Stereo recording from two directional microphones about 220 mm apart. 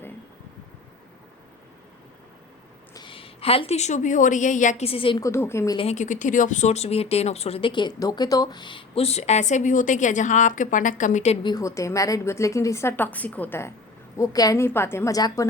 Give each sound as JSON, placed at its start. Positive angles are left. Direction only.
{"t": 2.9, "sound": "speech", "side_deg": 20}
{"t": 5.2, "sound": "a woman's voice", "side_deg": 10}
{"t": 11.5, "sound": "a woman's voice", "side_deg": 15}